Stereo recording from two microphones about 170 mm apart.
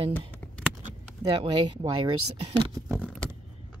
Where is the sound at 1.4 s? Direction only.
30° right (ahead or behind).